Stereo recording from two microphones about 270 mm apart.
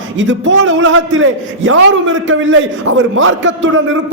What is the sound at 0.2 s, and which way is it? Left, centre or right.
A man's voice, right.